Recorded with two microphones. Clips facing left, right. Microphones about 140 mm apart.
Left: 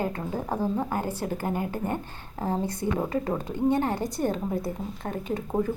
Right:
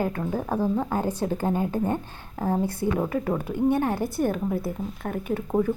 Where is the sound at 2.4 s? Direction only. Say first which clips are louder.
Right 3 dB; 15° left (ahead or behind).